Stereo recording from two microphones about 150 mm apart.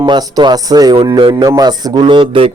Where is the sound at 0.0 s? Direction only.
25° right (ahead or behind).